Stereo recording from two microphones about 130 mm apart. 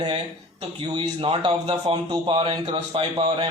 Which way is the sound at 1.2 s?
45° right (ahead or behind).